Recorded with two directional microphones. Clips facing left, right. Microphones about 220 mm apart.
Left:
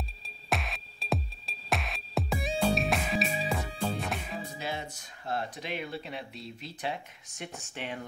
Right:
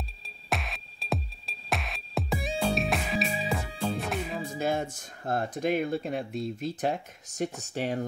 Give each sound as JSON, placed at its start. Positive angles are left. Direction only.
{"t": 0.5, "sound": "music", "side_deg": 0}
{"t": 4.6, "sound": "speech", "side_deg": -50}